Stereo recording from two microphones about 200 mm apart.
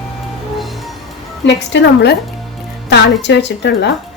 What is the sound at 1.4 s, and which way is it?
A woman's voice, 60° left (ahead or behind).